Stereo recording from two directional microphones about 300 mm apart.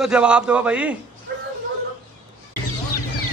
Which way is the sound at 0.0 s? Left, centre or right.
Centre.